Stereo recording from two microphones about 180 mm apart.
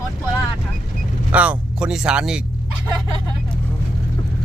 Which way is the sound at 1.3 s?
5° right (ahead or behind).